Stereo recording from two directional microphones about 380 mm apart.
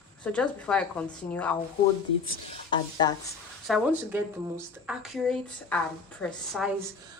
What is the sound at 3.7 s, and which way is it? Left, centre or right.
Speech, centre.